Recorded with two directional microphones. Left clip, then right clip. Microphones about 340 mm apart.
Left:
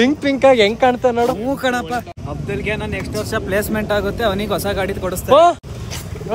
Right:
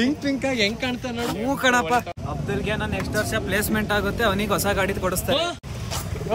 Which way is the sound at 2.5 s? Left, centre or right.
Left.